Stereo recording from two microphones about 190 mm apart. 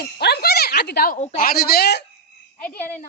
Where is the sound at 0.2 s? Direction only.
60° left (ahead or behind).